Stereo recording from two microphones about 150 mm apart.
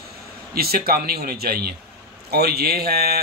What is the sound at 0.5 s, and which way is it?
A man's voice, 90° right.